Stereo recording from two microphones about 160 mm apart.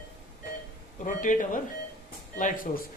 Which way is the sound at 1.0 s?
55° left (ahead or behind).